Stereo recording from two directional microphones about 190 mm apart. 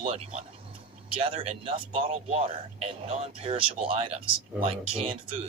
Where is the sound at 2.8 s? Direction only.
30° right (ahead or behind).